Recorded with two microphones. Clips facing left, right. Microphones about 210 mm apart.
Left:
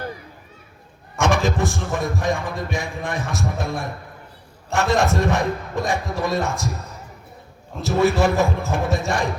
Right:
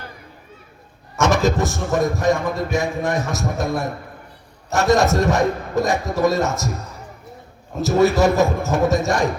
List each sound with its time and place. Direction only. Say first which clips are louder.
1.2 s speech: right 2 dB; 40° right (ahead or behind)
7.8 s speech: right 3 dB; 40° right (ahead or behind)